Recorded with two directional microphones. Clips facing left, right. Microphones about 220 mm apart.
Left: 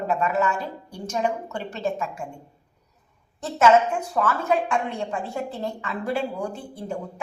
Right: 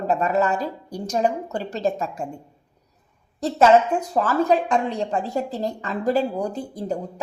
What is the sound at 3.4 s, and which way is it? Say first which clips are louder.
A woman's voice: right 2 dB; 35° right (ahead or behind).